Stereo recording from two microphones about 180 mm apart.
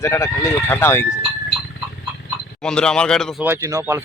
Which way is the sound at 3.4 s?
15° right (ahead or behind).